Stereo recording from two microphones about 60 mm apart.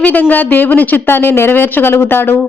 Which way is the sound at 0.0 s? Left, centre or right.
Left.